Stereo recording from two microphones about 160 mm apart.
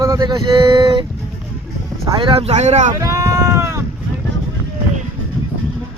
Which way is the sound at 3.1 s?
20° right (ahead or behind).